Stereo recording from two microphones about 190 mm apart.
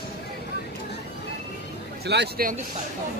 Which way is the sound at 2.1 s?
55° right (ahead or behind).